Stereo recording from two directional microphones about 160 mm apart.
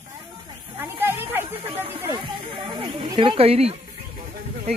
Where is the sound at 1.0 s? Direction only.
15° right (ahead or behind).